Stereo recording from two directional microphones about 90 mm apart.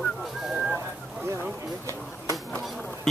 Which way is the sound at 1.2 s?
30° right (ahead or behind).